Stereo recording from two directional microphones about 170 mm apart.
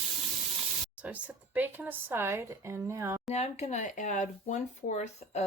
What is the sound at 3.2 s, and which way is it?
Speech, 40° left (ahead or behind).